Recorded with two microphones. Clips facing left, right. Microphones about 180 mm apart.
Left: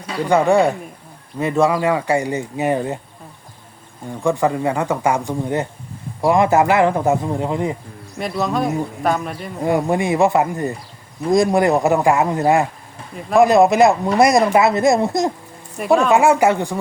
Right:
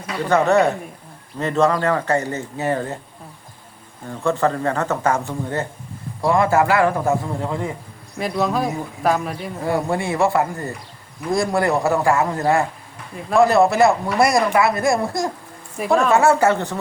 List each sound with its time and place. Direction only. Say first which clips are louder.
0.3 s speech: left 1 dB; 10° left (ahead or behind)
4.2 s a man's voice: left 2 dB; 15° left (ahead or behind)
8.2 s speech: even; centre (ahead or behind)
9.6 s a man's voice: left 4 dB; 20° left (ahead or behind)
15.8 s speech: left 3 dB; centre (ahead or behind)
16.1 s speech: left 2 dB; 15° left (ahead or behind)